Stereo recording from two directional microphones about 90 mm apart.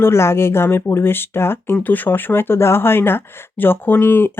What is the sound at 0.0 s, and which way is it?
Speech, 30° left (ahead or behind).